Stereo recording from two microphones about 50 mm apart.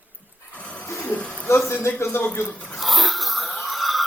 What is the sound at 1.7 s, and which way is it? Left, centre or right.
Speech, left.